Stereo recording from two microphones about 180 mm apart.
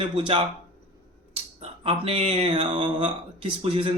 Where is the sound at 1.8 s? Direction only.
30° right (ahead or behind).